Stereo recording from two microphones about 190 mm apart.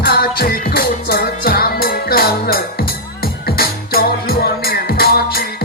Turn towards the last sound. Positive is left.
turn(degrees=50)  # may be behind; listen again after turning